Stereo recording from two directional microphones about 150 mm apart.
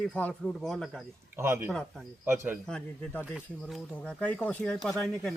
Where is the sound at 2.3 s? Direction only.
15° right (ahead or behind).